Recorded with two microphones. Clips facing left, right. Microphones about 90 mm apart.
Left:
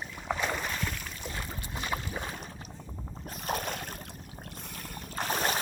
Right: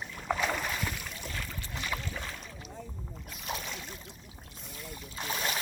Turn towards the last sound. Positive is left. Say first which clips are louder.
# left 4 dB
turn(degrees=45)  # may be behind; listen again after turning